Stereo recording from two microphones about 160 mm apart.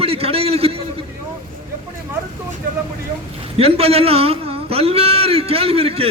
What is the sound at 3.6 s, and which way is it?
A man's voice, 40° right (ahead or behind).